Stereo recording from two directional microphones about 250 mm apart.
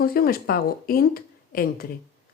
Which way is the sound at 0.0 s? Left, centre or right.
Left.